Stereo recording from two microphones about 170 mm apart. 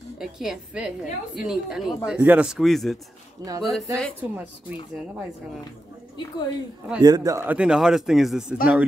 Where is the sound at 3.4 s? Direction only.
20° right (ahead or behind).